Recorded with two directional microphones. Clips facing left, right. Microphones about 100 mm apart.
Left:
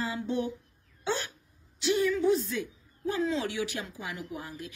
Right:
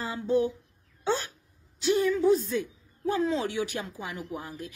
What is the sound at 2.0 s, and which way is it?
A woman's voice, 40° right (ahead or behind).